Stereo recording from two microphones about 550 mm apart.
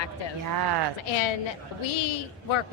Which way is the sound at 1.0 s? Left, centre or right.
Left.